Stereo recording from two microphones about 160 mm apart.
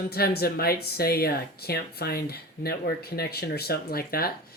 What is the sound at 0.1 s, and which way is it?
Speech, 75° left (ahead or behind).